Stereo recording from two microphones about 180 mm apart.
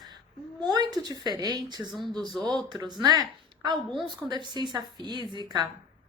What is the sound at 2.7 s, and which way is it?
A woman's voice, 25° right (ahead or behind).